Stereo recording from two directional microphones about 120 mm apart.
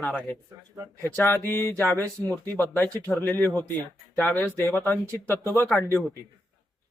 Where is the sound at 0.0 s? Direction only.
15° left (ahead or behind).